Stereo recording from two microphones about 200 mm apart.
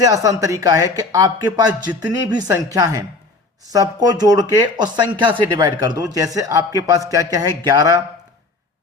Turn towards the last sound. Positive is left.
turn(degrees=-15)  # may be behind; listen again after turning